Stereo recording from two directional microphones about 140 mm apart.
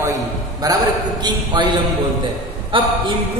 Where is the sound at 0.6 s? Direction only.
30° right (ahead or behind).